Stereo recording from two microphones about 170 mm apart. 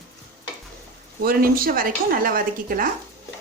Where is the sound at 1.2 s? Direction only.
60° right (ahead or behind).